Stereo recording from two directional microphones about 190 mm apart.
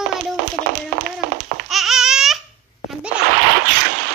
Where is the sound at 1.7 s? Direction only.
Centre (ahead or behind).